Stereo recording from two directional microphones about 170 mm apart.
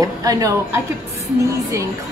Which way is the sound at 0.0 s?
20° right (ahead or behind).